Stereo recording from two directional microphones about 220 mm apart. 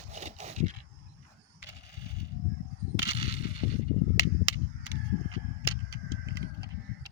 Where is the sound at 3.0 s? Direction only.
25° right (ahead or behind).